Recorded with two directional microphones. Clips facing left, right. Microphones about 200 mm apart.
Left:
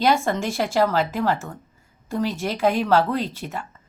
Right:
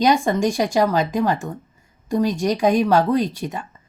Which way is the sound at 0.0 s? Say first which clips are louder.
Right 3 dB; 15° right (ahead or behind).